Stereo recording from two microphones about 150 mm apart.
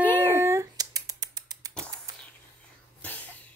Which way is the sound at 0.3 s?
20° right (ahead or behind).